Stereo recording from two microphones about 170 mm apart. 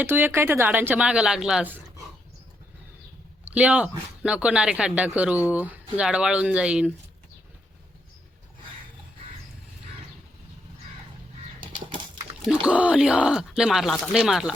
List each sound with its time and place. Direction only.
0.0 s speech: 10° right (ahead or behind)
3.5 s speech: 5° right (ahead or behind)
11.6 s dog: 30° right (ahead or behind)
12.6 s speech: 5° right (ahead or behind)